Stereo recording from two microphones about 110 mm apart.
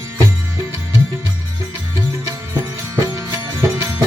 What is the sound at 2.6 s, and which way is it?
Music, 30° right (ahead or behind).